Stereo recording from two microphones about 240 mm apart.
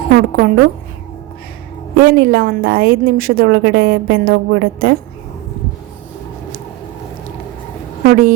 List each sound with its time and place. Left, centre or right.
0.1 s a woman's voice: right
2.0 s a woman's voice: right
8.0 s a woman's voice: right